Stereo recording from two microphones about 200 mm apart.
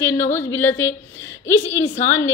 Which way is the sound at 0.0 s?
10° left (ahead or behind).